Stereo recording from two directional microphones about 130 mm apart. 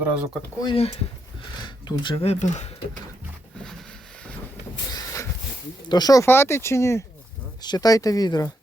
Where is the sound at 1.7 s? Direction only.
35° left (ahead or behind).